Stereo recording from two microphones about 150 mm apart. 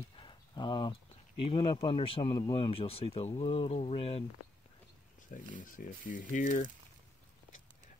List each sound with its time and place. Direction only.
0.2 s a sound: 30° left (ahead or behind)
1.4 s speech: 35° left (ahead or behind)
5.3 s speech: 65° left (ahead or behind)